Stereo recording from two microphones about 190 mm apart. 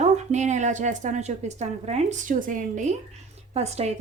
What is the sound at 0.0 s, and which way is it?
A woman's voice, 40° right (ahead or behind).